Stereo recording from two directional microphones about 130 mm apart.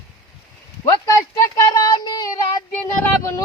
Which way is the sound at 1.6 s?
30° left (ahead or behind).